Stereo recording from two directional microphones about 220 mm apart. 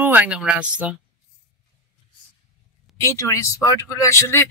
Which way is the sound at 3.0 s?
15° left (ahead or behind).